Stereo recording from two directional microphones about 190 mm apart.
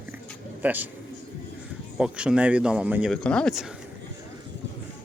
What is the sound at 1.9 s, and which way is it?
Speech, 5° right (ahead or behind).